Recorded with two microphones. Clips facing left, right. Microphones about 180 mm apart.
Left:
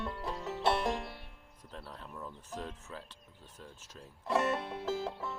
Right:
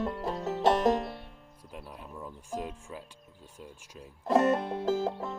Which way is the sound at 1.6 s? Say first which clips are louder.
Right 2 dB; 15° right (ahead or behind).